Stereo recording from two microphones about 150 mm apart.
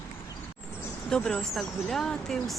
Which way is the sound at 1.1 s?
5° left (ahead or behind).